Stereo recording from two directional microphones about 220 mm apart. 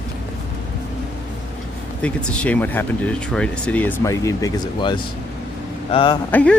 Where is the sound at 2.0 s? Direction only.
5° left (ahead or behind); by 6.2 s 20° left (ahead or behind).